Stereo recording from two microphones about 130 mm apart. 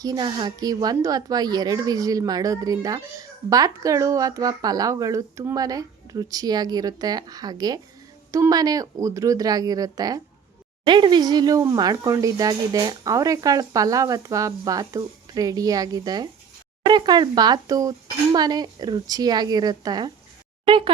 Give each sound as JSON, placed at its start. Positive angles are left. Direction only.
{"t": 0.0, "sound": "a woman's voice", "side_deg": -30}
{"t": 20.7, "sound": "speech", "side_deg": -40}